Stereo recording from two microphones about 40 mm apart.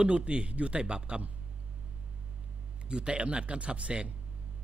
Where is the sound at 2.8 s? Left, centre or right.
Right.